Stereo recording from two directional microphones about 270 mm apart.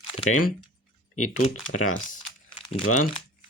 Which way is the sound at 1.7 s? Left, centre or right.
Left.